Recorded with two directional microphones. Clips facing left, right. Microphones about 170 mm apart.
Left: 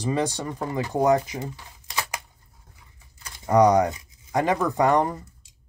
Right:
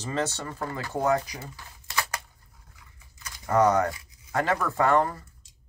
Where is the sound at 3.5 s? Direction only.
15° left (ahead or behind).